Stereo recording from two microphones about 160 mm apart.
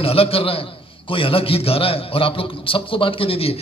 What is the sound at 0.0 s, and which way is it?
A man's voice, 35° left (ahead or behind).